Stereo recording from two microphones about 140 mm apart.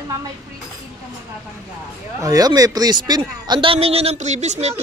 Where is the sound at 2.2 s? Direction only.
25° right (ahead or behind).